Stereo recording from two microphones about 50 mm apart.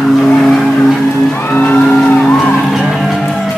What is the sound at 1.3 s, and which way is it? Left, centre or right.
Music, left.